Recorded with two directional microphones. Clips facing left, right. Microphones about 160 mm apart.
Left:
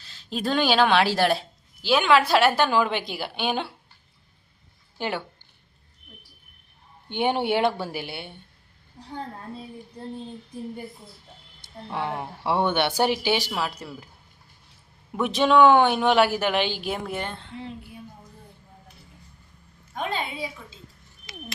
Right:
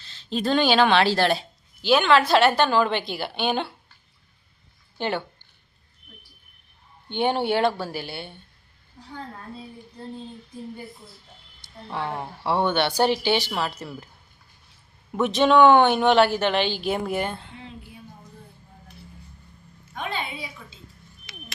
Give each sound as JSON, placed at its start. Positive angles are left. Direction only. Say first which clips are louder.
{"t": 0.0, "sound": "a woman's voice", "louder": "right 2 dB", "side_deg": 5}
{"t": 4.9, "sound": "speech", "louder": "right 2 dB", "side_deg": 5}
{"t": 7.1, "sound": "speech", "louder": "right 1 dB", "side_deg": 10}
{"t": 11.9, "sound": "speech", "louder": "even", "side_deg": 15}
{"t": 15.4, "sound": "speech", "louder": "right 1 dB", "side_deg": 0}
{"t": 16.9, "sound": "a woman's voice", "louder": "right 4 dB", "side_deg": -5}
{"t": 20.0, "sound": "a woman's voice", "louder": "left 2 dB", "side_deg": 40}